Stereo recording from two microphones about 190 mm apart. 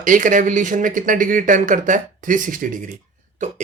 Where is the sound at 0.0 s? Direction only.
45° right (ahead or behind).